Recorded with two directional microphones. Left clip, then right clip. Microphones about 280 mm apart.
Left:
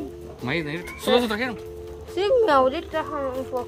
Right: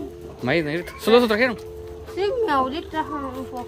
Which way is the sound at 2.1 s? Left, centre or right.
Left.